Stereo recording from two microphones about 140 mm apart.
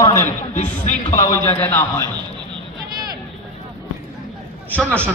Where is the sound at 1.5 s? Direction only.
15° left (ahead or behind).